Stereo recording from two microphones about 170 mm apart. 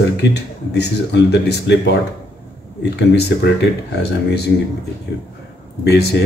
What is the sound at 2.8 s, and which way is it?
Speech, 75° left (ahead or behind).